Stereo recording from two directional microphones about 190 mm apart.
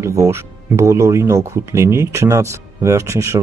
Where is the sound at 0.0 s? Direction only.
15° right (ahead or behind).